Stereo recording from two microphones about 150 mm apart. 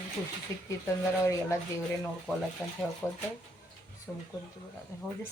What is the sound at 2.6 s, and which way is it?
Speech, 15° left (ahead or behind).